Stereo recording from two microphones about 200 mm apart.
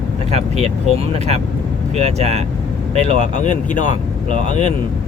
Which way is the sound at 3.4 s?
40° left (ahead or behind).